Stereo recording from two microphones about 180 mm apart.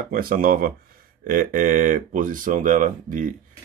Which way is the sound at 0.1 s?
55° right (ahead or behind).